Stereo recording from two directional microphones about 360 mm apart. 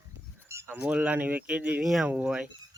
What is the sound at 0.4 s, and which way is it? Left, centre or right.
Speech, centre.